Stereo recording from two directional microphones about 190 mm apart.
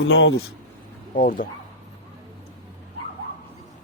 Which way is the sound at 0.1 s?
70° left (ahead or behind).